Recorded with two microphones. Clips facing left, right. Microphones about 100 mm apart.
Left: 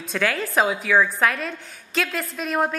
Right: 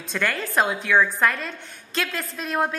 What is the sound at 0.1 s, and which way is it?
Speech, centre (ahead or behind).